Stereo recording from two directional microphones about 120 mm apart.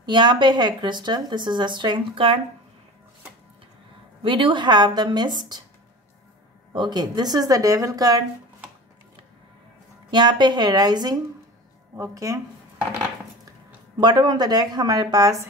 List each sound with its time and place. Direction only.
0.0 s speech: 40° right (ahead or behind)
4.2 s speech: 45° right (ahead or behind)
6.7 s speech: 40° right (ahead or behind)
10.1 s speech: 40° right (ahead or behind)
13.5 s speech: 35° right (ahead or behind)